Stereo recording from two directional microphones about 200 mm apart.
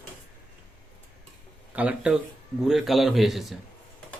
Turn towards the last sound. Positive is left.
turn(degrees=0)  # may be behind; listen again after turning